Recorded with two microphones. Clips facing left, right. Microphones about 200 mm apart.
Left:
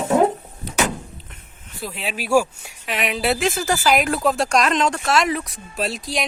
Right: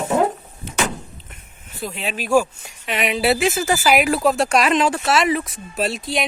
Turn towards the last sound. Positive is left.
turn(degrees=0)  # may be behind; listen again after turning